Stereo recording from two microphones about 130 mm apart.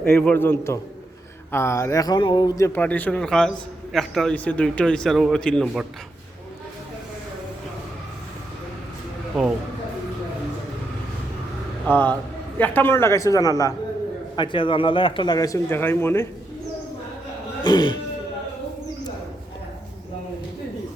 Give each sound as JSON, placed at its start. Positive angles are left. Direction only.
{"t": 0.0, "sound": "a man's voice", "side_deg": 10}
{"t": 2.8, "sound": "a man's voice", "side_deg": 10}
{"t": 11.9, "sound": "a man's voice", "side_deg": 15}
{"t": 14.3, "sound": "speech", "side_deg": 40}
{"t": 17.6, "sound": "speech", "side_deg": 35}